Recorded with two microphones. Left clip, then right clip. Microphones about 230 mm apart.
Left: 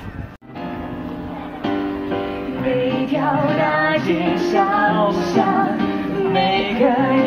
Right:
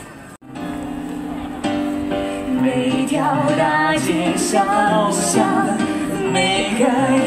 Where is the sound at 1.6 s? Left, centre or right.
Right.